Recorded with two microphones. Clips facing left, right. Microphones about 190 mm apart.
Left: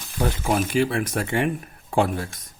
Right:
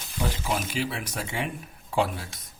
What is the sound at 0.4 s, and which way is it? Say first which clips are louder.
Speech: left 11 dB; 50° left (ahead or behind).